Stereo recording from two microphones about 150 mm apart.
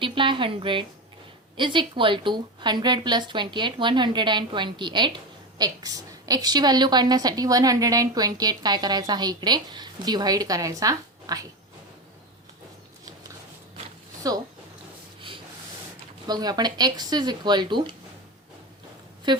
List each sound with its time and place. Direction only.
0.0 s a woman's voice: 35° right (ahead or behind)
16.2 s a woman's voice: 25° right (ahead or behind)
19.3 s a woman's voice: 30° right (ahead or behind)